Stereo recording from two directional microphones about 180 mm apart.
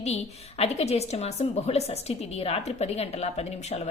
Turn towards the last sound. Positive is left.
turn(degrees=35)  # may be behind; listen again after turning